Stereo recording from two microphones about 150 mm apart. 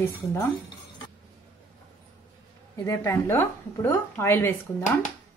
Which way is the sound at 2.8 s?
20° left (ahead or behind).